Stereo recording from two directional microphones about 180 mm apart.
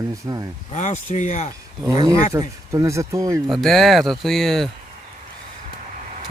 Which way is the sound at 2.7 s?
15° right (ahead or behind).